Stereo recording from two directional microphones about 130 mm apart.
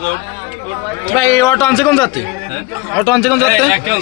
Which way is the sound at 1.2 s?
25° left (ahead or behind).